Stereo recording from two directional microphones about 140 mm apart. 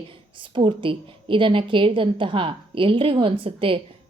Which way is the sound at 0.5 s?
40° right (ahead or behind).